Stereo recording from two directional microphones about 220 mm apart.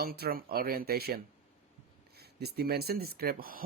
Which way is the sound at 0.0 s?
40° right (ahead or behind).